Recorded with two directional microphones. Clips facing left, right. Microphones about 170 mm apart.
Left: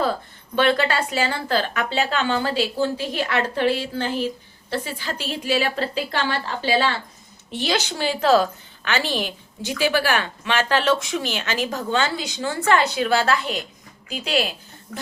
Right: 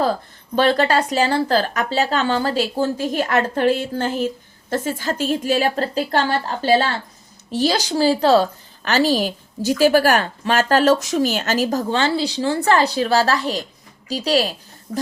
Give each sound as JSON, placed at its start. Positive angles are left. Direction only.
{"t": 0.5, "sound": "a woman's voice", "side_deg": -40}